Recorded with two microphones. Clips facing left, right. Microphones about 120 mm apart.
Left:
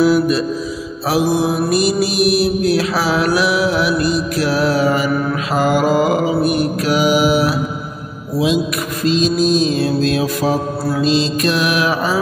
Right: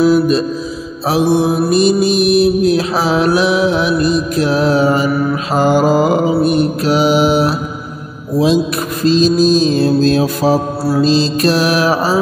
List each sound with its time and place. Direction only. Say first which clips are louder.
0.0 s music: right 2 dB; 25° right (ahead or behind)
1.1 s mantra: right 3 dB; 25° right (ahead or behind)
9.0 s mantra: right 4 dB; 35° right (ahead or behind)